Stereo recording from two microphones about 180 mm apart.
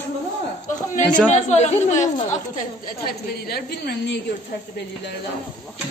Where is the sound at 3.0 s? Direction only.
60° left (ahead or behind).